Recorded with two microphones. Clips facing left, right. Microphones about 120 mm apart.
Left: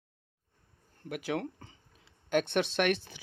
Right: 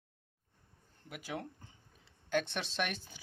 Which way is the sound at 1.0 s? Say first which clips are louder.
Left 8 dB; 65° left (ahead or behind).